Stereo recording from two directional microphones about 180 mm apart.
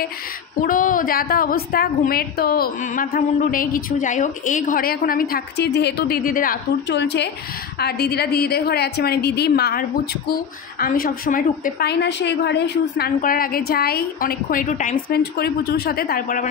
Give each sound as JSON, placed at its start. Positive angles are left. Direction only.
{"t": 0.7, "sound": "a woman's voice", "side_deg": 50}
{"t": 7.0, "sound": "a woman's voice", "side_deg": 70}
{"t": 11.9, "sound": "a woman's voice", "side_deg": 70}